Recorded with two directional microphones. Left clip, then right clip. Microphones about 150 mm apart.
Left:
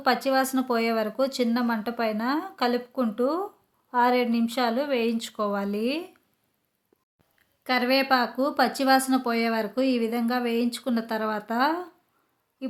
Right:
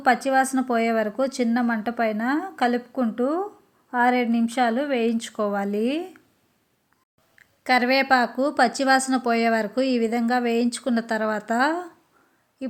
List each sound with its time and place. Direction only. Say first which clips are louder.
0.0 s speech: right 3 dB; 10° right (ahead or behind)
7.3 s speech: right 5 dB; 25° right (ahead or behind)